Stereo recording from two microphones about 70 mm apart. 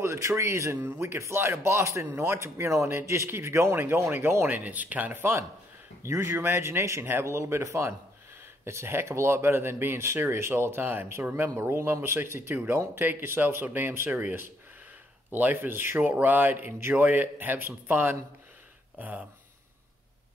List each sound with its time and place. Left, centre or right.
0.0 s speech: right
4.5 s speech: right
15.3 s speech: right